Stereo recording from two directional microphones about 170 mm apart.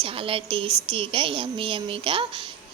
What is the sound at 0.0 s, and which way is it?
A woman's voice, 30° right (ahead or behind).